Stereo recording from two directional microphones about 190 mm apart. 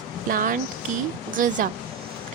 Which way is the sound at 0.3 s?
45° right (ahead or behind).